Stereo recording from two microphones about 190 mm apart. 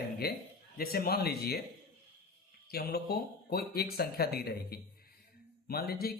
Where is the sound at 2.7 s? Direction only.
55° left (ahead or behind).